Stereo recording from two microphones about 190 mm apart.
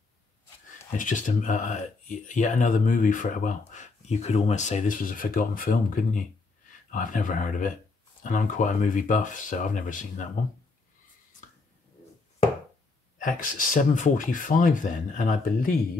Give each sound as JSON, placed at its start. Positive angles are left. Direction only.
{"t": 0.9, "sound": "speech", "side_deg": 45}
{"t": 13.2, "sound": "speech", "side_deg": 45}